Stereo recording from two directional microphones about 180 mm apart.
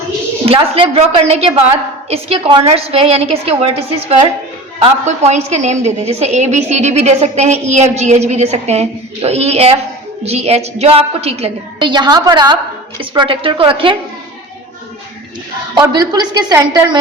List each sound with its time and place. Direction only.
0.4 s a woman's voice: 30° right (ahead or behind)
15.7 s a woman's voice: 25° right (ahead or behind)